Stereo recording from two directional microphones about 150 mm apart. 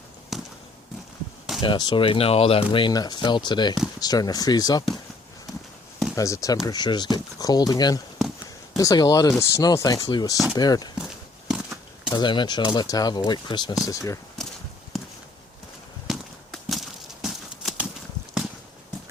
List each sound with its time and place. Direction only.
0.3 s basketball bounce: centre (ahead or behind)
1.6 s speech: 30° left (ahead or behind)
6.1 s speech: 20° left (ahead or behind)
10.9 s walk: 5° right (ahead or behind)
12.1 s speech: 30° left (ahead or behind)
14.9 s a sound: centre (ahead or behind)
16.0 s clip-clop: centre (ahead or behind)